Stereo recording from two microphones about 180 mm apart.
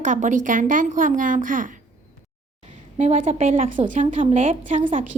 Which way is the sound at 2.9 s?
35° right (ahead or behind).